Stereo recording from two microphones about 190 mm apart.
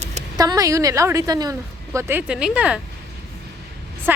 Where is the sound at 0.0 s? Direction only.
35° right (ahead or behind).